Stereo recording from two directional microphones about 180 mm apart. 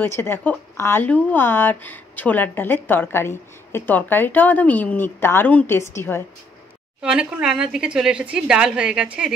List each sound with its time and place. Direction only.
0.0 s speech: 10° left (ahead or behind)
7.0 s speech: 5° right (ahead or behind)